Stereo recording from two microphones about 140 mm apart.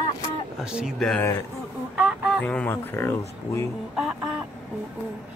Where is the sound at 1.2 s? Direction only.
25° left (ahead or behind).